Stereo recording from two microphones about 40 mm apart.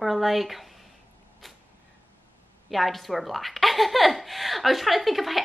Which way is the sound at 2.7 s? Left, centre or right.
Centre.